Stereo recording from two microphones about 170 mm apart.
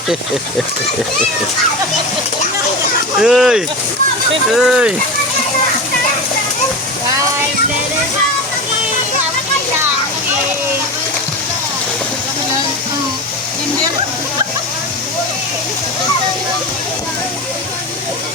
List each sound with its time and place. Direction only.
3.2 s speech: 5° right (ahead or behind)